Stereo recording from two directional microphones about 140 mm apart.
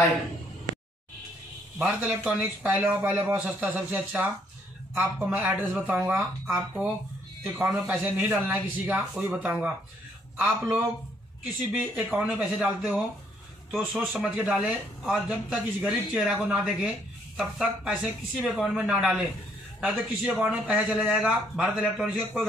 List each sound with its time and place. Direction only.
1.9 s a man's voice: 10° right (ahead or behind)